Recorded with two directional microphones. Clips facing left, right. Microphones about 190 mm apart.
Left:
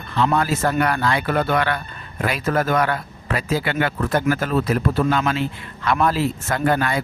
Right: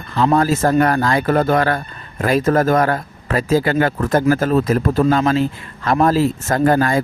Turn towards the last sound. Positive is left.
turn(degrees=-40)  # may be behind; listen again after turning